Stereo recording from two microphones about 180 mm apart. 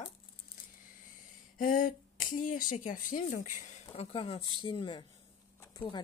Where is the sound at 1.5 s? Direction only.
50° left (ahead or behind).